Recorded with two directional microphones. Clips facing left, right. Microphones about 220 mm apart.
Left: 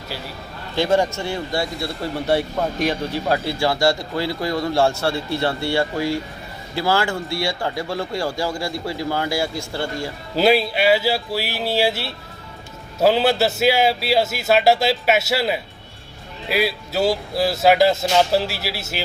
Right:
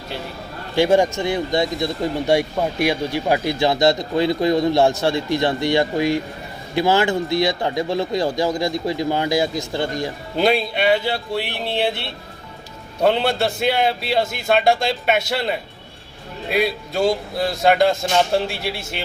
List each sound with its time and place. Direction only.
0.8 s a man's voice: 15° right (ahead or behind)
10.3 s a man's voice: 5° left (ahead or behind)